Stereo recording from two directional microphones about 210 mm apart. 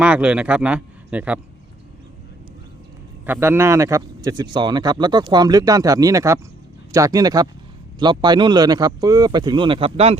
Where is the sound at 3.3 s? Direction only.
10° right (ahead or behind).